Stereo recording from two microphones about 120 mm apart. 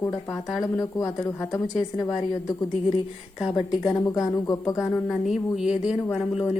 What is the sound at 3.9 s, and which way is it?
Speech, 30° left (ahead or behind).